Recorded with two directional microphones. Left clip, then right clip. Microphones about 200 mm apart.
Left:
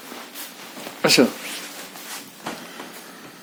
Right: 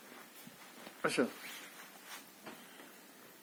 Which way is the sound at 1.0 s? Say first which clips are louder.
Left 18 dB; 5° left (ahead or behind).